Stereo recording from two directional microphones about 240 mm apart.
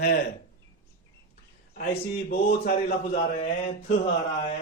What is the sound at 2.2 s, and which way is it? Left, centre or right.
Speech, left.